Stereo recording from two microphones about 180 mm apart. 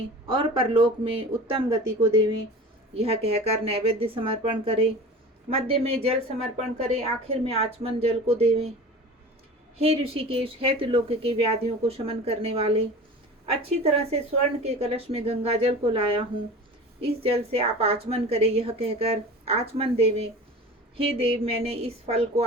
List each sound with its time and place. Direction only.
0.3 s speech: 30° right (ahead or behind)
9.8 s speech: 35° right (ahead or behind)